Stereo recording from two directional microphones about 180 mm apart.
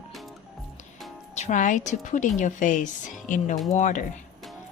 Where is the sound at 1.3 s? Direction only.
40° left (ahead or behind).